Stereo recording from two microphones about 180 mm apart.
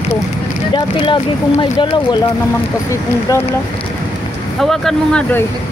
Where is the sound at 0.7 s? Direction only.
25° left (ahead or behind).